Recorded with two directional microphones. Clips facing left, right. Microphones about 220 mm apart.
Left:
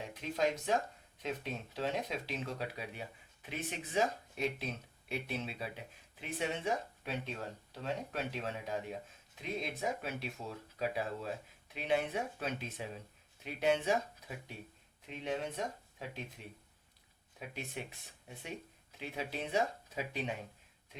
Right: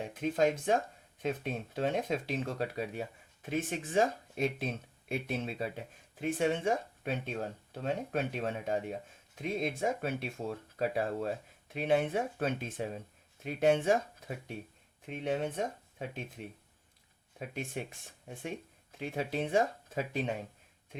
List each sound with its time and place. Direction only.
0.1 s speech: 50° right (ahead or behind)
18.3 s speech: 50° right (ahead or behind)